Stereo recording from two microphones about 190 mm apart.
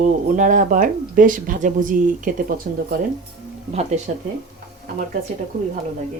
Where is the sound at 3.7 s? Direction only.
35° right (ahead or behind).